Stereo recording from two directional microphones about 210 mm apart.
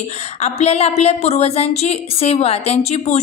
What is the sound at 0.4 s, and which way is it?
A woman's voice, 30° left (ahead or behind).